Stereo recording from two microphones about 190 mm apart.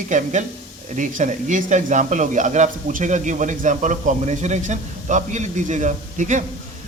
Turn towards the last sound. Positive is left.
turn(degrees=-40)  # may be behind; listen again after turning